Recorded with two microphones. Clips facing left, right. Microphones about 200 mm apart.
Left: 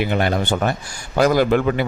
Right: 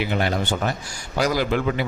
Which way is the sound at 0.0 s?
55° left (ahead or behind).